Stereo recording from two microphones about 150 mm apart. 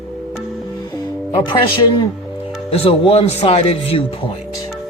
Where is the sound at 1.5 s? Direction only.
30° left (ahead or behind).